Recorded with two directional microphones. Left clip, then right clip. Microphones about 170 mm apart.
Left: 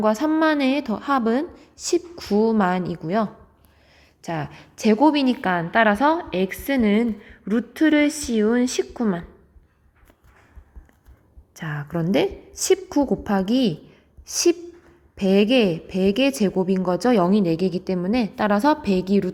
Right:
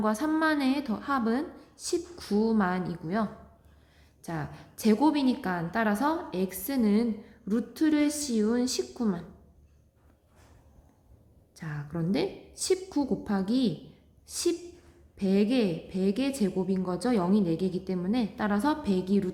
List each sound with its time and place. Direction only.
0.0 s a woman's voice: 30° left (ahead or behind)
5.5 s a woman's voice: 25° left (ahead or behind)
11.6 s a woman's voice: 35° left (ahead or behind)